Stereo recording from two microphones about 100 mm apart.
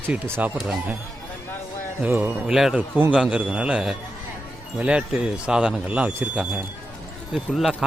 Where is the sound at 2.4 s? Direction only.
5° right (ahead or behind).